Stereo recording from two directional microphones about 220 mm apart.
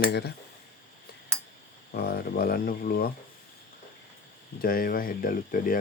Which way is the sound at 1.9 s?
45° left (ahead or behind).